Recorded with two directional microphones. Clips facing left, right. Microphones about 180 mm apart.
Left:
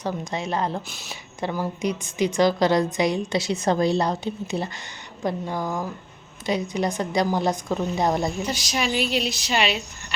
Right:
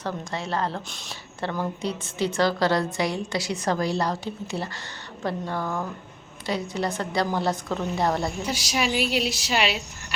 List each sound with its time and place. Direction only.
0.0 s a woman's voice: 15° left (ahead or behind)
0.9 s a woman's voice: 5° left (ahead or behind)
8.4 s a woman's voice: 10° right (ahead or behind)